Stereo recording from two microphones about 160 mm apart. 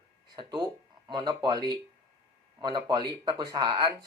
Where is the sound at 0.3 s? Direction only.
25° right (ahead or behind).